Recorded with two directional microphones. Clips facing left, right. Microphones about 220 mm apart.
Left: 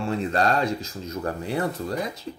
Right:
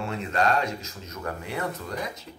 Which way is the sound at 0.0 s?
35° left (ahead or behind).